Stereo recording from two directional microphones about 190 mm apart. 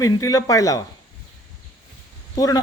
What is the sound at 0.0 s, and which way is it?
Speech, 20° left (ahead or behind).